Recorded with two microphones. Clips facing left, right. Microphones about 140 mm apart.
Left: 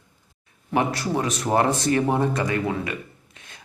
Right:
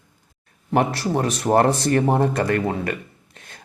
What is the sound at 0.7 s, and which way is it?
Speech, 50° right (ahead or behind).